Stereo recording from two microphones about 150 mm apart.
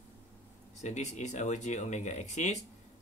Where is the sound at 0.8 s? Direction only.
50° left (ahead or behind).